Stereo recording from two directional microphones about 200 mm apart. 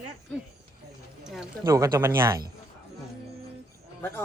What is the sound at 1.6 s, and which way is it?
Speech, 15° right (ahead or behind).